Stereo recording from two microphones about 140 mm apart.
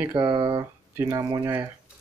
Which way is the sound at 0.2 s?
35° right (ahead or behind).